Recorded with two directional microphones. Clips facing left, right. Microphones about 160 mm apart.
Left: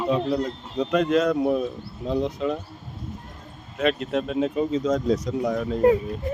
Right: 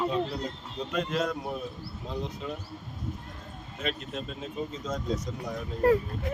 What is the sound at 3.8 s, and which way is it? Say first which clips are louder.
Speech: left 11 dB; 75° left (ahead or behind).